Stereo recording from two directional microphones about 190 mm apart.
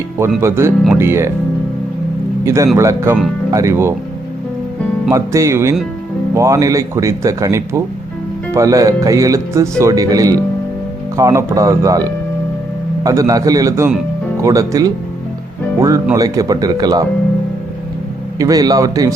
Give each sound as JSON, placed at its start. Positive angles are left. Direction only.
{"t": 0.4, "sound": "speech", "side_deg": -15}
{"t": 2.4, "sound": "speech", "side_deg": -15}
{"t": 5.1, "sound": "speech", "side_deg": -15}
{"t": 16.1, "sound": "speech", "side_deg": -20}
{"t": 18.3, "sound": "speech", "side_deg": -20}